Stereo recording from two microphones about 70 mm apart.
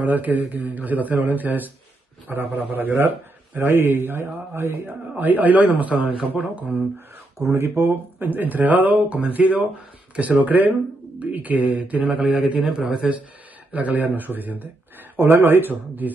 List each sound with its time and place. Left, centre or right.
0.0 s a man's voice: right
5.1 s speech: right
7.5 s a man's voice: right